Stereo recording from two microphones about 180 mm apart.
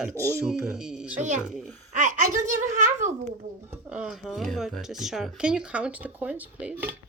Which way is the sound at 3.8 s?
5° right (ahead or behind).